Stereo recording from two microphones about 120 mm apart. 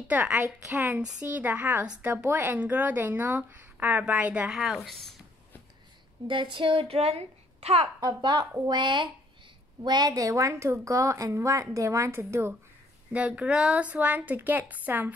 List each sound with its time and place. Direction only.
0.1 s speech: 15° right (ahead or behind)
6.2 s a child's voice: 45° right (ahead or behind)
8.0 s a woman's voice: 40° right (ahead or behind); by 15.1 s 15° right (ahead or behind)